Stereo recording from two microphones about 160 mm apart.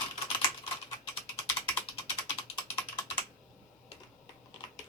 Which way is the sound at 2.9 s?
30° left (ahead or behind).